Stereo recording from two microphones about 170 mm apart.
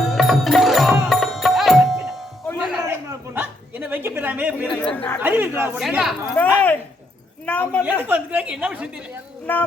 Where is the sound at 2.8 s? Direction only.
15° right (ahead or behind).